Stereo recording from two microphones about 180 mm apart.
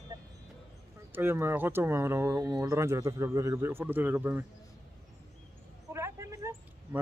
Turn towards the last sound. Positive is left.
turn(degrees=-15)  # may be behind; listen again after turning